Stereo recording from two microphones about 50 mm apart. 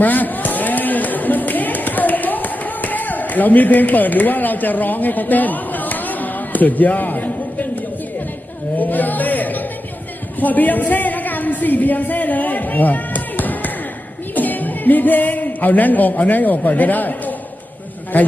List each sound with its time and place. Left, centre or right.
0.0 s a sound: left
8.7 s chatter: left
10.4 s a woman's voice: left